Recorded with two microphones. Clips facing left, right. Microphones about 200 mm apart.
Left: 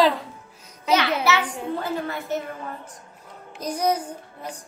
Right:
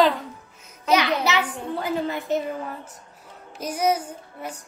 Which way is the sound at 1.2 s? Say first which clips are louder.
Left 1 dB; 15° right (ahead or behind).